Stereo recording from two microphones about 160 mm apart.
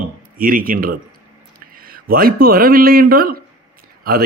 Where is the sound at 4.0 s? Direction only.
65° right (ahead or behind).